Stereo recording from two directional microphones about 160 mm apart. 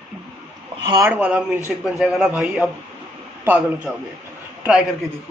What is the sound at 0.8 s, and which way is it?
Speech, 25° right (ahead or behind).